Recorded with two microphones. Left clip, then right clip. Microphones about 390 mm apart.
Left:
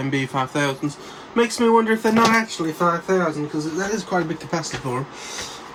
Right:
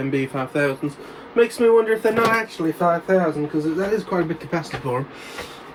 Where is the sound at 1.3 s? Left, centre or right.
Left.